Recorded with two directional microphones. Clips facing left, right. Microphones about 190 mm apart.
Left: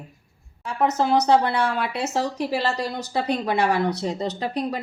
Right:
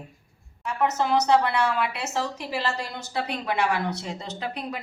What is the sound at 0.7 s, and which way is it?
Speech, 35° left (ahead or behind).